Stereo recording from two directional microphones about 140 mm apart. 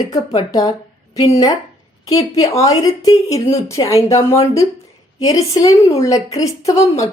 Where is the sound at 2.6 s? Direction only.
25° left (ahead or behind).